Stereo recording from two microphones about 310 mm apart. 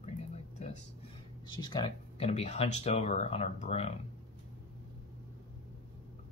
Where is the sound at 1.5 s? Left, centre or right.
Centre.